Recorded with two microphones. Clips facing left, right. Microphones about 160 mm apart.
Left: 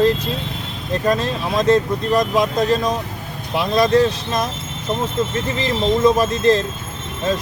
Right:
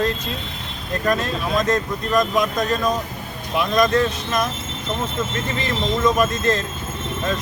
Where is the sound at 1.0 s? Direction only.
30° left (ahead or behind).